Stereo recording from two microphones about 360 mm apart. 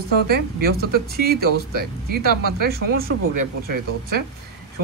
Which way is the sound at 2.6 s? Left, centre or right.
Right.